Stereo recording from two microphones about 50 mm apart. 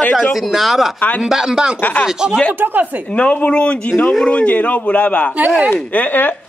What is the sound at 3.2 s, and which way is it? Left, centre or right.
A man's voice, left.